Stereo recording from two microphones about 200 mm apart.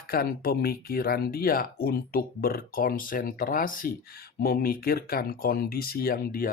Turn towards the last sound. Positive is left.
turn(degrees=45)  # may be behind; listen again after turning